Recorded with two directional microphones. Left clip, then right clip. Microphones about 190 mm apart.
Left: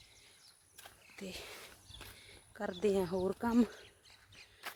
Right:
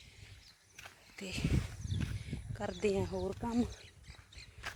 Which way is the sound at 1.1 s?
5° right (ahead or behind).